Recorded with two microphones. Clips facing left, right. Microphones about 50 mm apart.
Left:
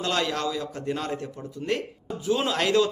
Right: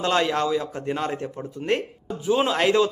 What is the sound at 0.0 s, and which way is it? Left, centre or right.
Speech, right.